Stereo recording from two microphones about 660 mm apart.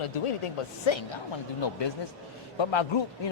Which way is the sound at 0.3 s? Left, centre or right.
Left.